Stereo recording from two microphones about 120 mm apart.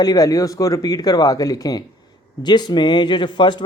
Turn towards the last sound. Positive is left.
turn(degrees=40)  # may be behind; listen again after turning